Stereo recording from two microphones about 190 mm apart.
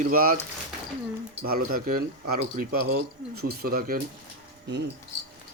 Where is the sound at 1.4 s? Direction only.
50° right (ahead or behind).